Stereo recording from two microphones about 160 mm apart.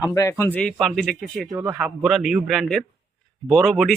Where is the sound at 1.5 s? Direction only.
15° right (ahead or behind).